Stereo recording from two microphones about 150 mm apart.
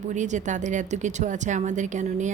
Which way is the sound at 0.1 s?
55° right (ahead or behind).